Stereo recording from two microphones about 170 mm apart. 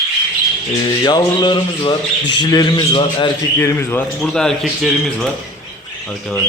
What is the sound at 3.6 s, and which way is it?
Speech, 15° left (ahead or behind).